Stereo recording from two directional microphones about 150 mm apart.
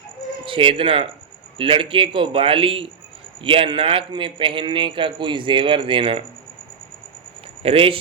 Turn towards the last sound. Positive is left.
turn(degrees=-40)  # may be behind; listen again after turning